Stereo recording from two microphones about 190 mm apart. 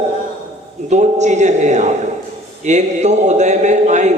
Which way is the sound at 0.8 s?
40° right (ahead or behind).